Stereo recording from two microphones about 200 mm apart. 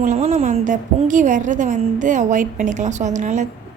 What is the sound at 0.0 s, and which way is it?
A woman's voice, 35° right (ahead or behind).